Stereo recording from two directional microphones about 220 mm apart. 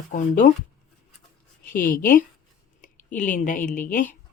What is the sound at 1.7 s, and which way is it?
Speech, 40° left (ahead or behind).